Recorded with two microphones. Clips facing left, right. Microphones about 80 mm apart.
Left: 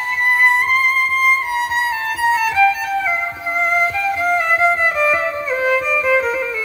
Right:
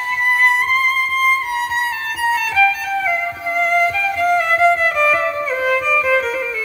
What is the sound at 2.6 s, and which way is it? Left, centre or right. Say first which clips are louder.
Music: left 1 dB; centre.